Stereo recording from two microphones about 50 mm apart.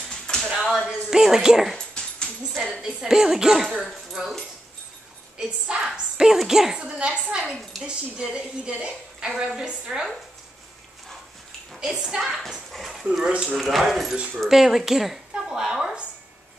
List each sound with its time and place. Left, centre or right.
0.1 s a sound: centre
0.5 s a sound: centre
0.8 s a woman's voice: centre
1.8 s dog: centre
2.7 s a woman's voice: centre
5.4 s a woman's voice: centre
9.3 s speech: centre
9.6 s a woman's voice: centre
11.8 s a woman's voice: centre
13.3 s a woman's voice: right
13.6 s a woman's voice: centre